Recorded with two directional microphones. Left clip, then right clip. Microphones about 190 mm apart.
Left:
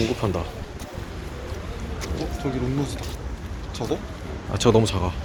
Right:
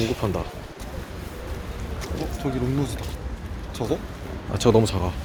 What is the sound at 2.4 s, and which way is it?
Speech, 55° right (ahead or behind).